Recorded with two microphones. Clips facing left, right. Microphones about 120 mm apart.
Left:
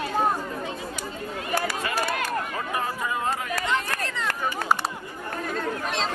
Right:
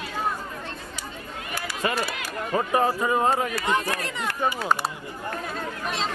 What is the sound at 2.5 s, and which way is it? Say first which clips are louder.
Speech: right 6 dB; 35° right (ahead or behind).